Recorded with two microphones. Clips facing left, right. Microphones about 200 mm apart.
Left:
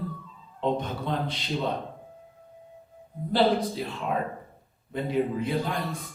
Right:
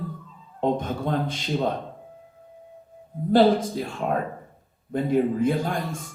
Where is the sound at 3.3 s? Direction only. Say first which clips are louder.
Right 5 dB; 45° right (ahead or behind).